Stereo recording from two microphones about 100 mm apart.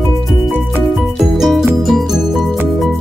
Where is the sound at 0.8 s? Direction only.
Centre (ahead or behind).